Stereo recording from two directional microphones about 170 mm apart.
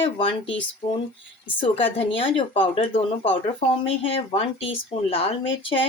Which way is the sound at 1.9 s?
30° left (ahead or behind).